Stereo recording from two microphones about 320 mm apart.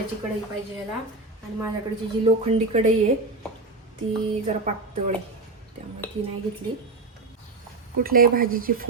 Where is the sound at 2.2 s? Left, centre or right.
Centre.